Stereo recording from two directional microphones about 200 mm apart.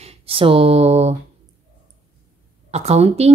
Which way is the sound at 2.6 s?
30° right (ahead or behind).